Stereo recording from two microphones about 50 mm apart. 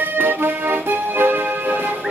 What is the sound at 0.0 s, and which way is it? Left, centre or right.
Music, right.